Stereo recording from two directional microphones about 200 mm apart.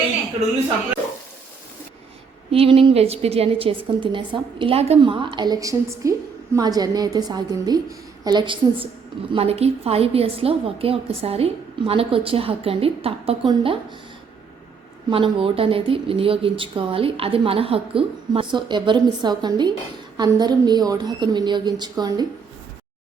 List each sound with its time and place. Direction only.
2.5 s a woman's voice: 30° right (ahead or behind)
15.1 s a woman's voice: 25° right (ahead or behind)